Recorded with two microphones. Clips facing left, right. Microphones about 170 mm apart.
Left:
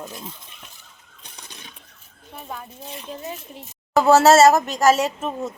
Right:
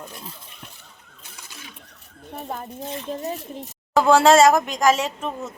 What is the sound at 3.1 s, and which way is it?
Speech, 40° right (ahead or behind).